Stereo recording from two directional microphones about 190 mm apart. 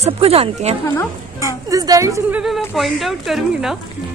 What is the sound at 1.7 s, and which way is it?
Speech, 20° right (ahead or behind).